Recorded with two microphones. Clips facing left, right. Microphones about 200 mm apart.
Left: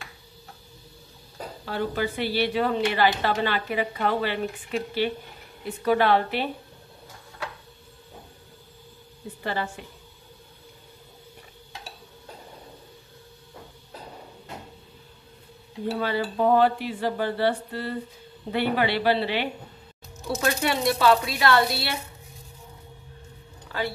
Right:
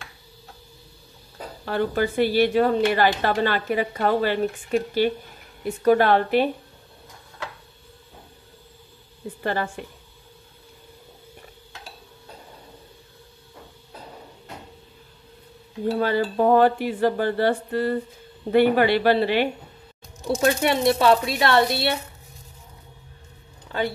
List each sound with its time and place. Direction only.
1.7 s dishes: 45° right (ahead or behind)
9.4 s a woman's voice: 50° right (ahead or behind)
16.0 s dishes: 45° right (ahead or behind)
20.2 s speech: 25° right (ahead or behind)